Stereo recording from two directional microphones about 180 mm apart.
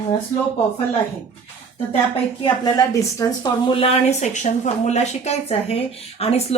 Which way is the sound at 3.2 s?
25° left (ahead or behind).